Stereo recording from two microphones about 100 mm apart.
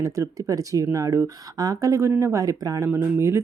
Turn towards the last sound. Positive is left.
turn(degrees=-25)  # may be behind; listen again after turning